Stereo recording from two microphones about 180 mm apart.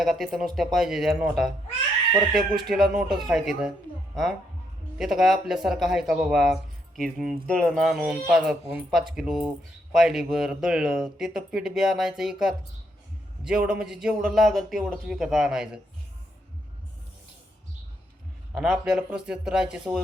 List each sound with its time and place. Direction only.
0.0 s speech: centre (ahead or behind)
18.5 s speech: centre (ahead or behind)